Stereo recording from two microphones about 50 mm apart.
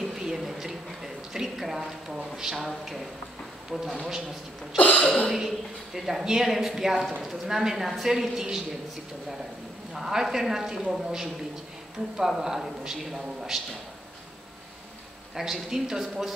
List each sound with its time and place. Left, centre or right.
0.0 s a sound: centre
3.7 s speech: centre
4.7 s throat clearing: left
5.0 s speech: centre
5.9 s a man's voice: centre
9.9 s a man's voice: centre
15.3 s a man's voice: centre